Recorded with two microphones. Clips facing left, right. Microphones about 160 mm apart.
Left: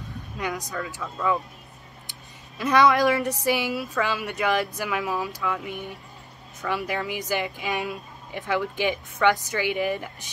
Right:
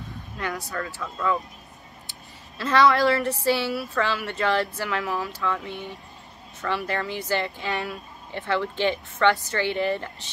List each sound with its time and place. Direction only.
0.4 s speech: 15° left (ahead or behind)
2.0 s speech: 15° left (ahead or behind)